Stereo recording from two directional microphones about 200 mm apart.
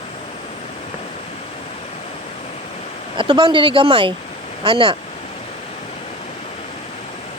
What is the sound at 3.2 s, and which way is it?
Speech, 25° right (ahead or behind).